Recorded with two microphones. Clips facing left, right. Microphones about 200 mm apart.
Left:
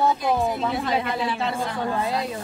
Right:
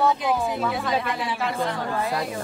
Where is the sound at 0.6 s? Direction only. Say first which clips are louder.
Left 1 dB; 25° left (ahead or behind).